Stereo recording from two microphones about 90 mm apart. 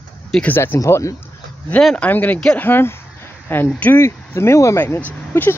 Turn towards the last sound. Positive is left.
turn(degrees=25)  # may be behind; listen again after turning